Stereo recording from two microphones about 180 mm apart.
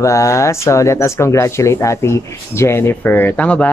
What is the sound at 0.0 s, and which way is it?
Speech, 15° left (ahead or behind).